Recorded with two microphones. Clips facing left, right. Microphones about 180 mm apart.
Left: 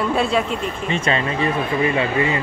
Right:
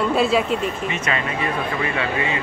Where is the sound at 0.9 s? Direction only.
30° left (ahead or behind).